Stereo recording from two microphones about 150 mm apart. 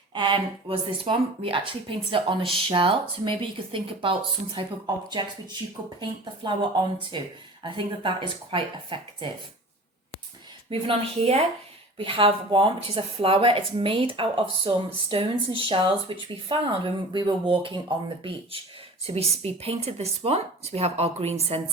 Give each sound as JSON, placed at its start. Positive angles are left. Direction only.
{"t": 0.1, "sound": "speech", "side_deg": -30}
{"t": 6.4, "sound": "speech", "side_deg": -30}
{"t": 10.7, "sound": "speech", "side_deg": -40}